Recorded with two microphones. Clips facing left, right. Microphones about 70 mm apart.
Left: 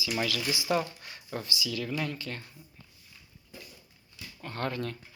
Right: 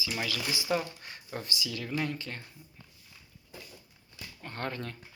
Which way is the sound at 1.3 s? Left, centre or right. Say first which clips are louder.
Left 2 dB; right.